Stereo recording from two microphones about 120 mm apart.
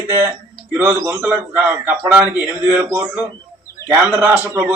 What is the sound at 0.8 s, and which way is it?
A man's voice, 10° right (ahead or behind).